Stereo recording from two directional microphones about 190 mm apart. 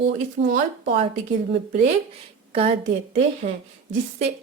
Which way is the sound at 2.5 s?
30° right (ahead or behind).